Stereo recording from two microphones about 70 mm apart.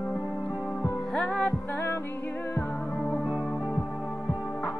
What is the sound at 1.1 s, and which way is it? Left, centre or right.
Music, centre.